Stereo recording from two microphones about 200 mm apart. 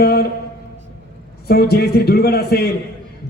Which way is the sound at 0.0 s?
50° left (ahead or behind).